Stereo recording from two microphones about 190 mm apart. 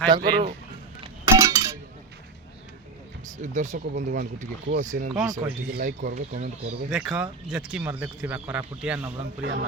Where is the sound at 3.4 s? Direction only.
40° right (ahead or behind).